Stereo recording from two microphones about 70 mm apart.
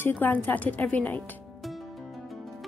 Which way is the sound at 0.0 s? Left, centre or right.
Left.